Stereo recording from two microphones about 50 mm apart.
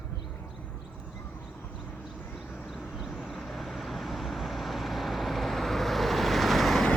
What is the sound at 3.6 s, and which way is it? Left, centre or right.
Vehicle, centre.